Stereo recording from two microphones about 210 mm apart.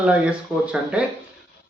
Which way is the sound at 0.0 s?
5° right (ahead or behind).